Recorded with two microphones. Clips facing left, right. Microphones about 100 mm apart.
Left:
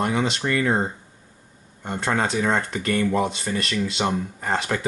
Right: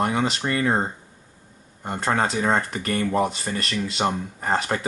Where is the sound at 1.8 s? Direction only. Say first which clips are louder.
Right 1 dB; 35° right (ahead or behind).